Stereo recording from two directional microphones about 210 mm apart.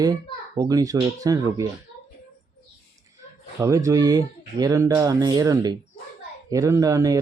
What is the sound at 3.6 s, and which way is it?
Speech, 15° right (ahead or behind).